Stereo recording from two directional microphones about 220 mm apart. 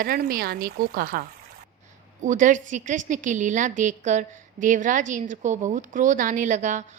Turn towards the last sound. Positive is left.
turn(degrees=-35)  # may be behind; listen again after turning